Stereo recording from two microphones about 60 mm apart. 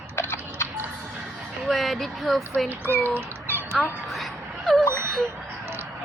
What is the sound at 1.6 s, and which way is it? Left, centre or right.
Speech, centre.